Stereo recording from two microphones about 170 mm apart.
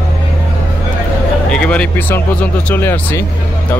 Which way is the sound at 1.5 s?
5° left (ahead or behind).